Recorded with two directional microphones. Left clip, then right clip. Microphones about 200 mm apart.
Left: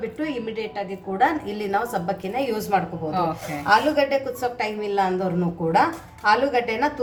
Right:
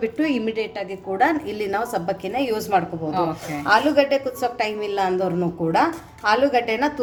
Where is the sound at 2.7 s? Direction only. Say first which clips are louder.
Right 2 dB; 5° right (ahead or behind).